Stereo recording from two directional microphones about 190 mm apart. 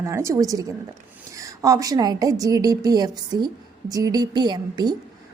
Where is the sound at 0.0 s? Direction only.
15° right (ahead or behind).